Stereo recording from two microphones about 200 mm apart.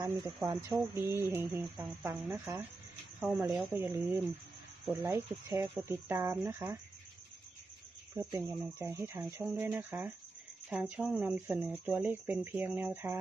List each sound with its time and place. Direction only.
0.5 s speech: 15° right (ahead or behind)
8.1 s speech: 15° right (ahead or behind)